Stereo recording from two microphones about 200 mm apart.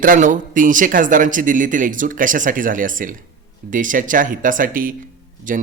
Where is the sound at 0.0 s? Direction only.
40° right (ahead or behind).